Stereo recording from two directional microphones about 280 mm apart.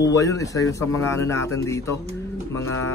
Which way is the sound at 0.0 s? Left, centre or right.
Centre.